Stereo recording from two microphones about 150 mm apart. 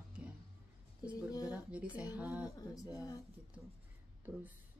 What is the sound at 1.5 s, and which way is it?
Speech, 10° right (ahead or behind).